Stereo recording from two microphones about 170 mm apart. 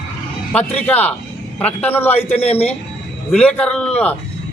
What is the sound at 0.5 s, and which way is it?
A man's voice, 10° left (ahead or behind).